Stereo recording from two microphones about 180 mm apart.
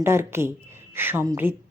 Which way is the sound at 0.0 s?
15° right (ahead or behind).